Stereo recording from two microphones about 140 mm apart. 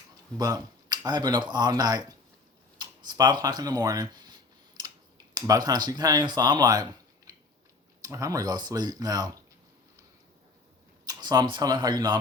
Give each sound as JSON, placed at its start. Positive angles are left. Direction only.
{"t": 0.3, "sound": "speech", "side_deg": -30}
{"t": 7.3, "sound": "a sound", "side_deg": -30}
{"t": 8.0, "sound": "speech", "side_deg": -25}
{"t": 11.0, "sound": "speech", "side_deg": -30}